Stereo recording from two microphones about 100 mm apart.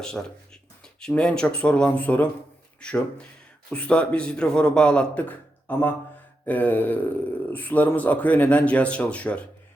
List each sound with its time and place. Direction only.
0.0 s a man's voice: 5° left (ahead or behind)